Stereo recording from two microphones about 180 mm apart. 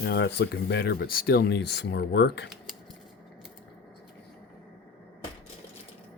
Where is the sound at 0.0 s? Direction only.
70° left (ahead or behind).